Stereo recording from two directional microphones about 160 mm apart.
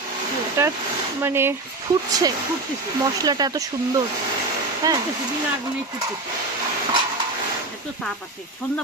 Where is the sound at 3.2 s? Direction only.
25° right (ahead or behind).